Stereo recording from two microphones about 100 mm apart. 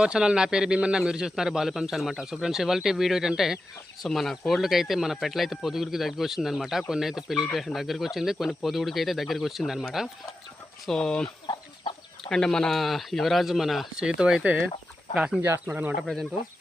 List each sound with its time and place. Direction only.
0.0 s a man's voice: 10° right (ahead or behind); by 11.3 s 5° left (ahead or behind)
11.4 s chicken: 60° left (ahead or behind)
12.3 s a man's voice: 5° left (ahead or behind); by 16.0 s 15° right (ahead or behind)